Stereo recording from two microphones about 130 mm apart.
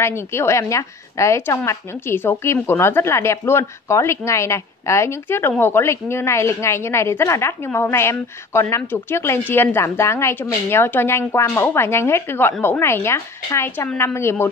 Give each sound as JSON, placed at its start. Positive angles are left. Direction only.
{"t": 0.0, "sound": "a woman's voice", "side_deg": 20}